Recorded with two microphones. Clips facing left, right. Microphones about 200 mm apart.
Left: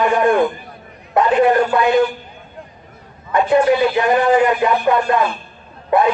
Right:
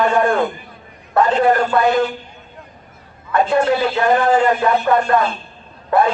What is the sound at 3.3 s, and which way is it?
A man's voice, 15° left (ahead or behind).